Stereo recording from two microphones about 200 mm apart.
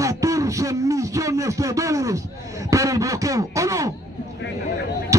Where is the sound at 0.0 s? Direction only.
15° right (ahead or behind).